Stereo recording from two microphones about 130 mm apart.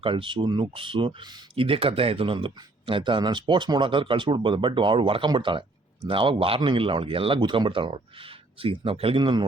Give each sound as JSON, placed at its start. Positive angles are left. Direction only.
{"t": 0.0, "sound": "speech", "side_deg": -40}